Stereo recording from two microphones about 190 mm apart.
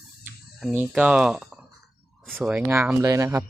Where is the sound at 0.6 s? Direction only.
5° right (ahead or behind).